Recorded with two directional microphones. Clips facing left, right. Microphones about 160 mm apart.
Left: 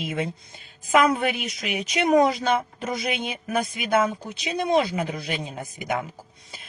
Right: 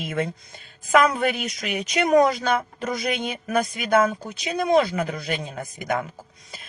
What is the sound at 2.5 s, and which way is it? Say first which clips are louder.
Speech: even; 25° left (ahead or behind).